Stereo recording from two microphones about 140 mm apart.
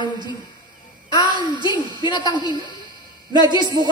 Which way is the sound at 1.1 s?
35° left (ahead or behind).